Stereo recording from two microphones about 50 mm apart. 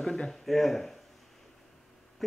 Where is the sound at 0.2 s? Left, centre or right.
Centre.